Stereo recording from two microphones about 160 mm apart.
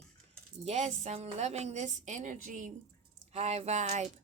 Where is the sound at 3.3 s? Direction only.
40° right (ahead or behind).